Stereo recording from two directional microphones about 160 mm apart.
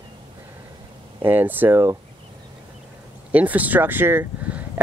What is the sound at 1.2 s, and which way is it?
Speech, 10° right (ahead or behind).